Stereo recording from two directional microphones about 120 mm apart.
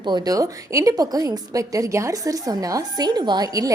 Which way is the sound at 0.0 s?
35° right (ahead or behind).